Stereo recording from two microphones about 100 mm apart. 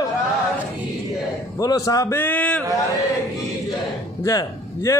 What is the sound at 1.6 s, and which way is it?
Speech, 35° left (ahead or behind).